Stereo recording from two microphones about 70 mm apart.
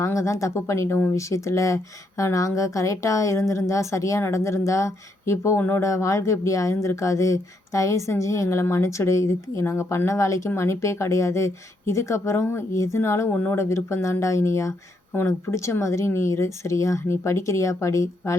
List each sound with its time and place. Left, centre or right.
0.0 s speech: left
13.3 s speech: left
13.6 s speech: left